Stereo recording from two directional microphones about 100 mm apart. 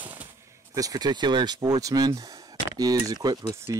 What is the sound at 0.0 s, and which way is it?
Gunshot, 15° right (ahead or behind).